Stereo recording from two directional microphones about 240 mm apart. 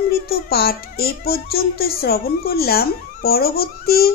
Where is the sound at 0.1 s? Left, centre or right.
Left.